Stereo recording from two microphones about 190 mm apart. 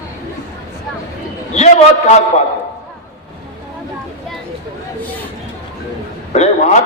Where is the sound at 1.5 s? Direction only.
35° left (ahead or behind).